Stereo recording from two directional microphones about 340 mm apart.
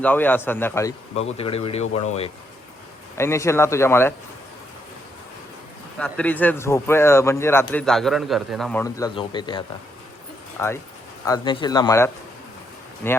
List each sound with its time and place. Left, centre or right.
0.0 s a man's voice: centre
3.2 s a man's voice: centre
6.0 s a man's voice: centre